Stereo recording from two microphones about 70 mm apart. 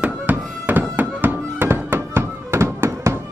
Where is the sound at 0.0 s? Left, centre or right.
Right.